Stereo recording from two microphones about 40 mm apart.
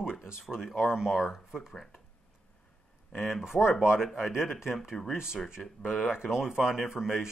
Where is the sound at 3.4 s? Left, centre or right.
Centre.